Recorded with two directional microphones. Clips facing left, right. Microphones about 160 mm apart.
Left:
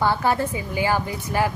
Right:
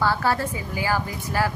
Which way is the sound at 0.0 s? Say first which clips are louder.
Left 2 dB; 20° left (ahead or behind).